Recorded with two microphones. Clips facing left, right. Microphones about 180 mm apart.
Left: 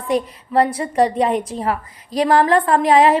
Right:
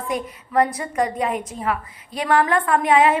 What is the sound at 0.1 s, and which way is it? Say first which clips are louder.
A woman's voice: left 6 dB; 30° left (ahead or behind).